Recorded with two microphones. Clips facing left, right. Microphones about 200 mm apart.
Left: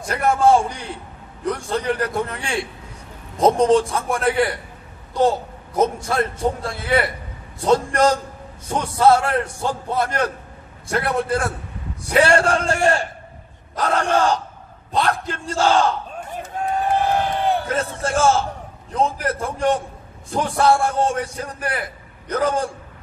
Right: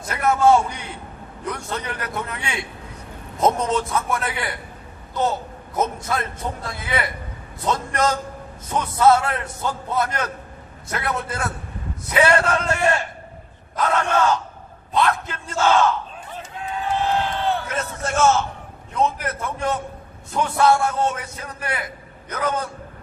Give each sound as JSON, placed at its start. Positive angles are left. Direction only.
{"t": 0.1, "sound": "a man's voice", "side_deg": 35}
{"t": 5.8, "sound": "a man's voice", "side_deg": 30}
{"t": 16.5, "sound": "a sound", "side_deg": 45}
{"t": 17.2, "sound": "crowd", "side_deg": 15}
{"t": 17.6, "sound": "a man's voice", "side_deg": 30}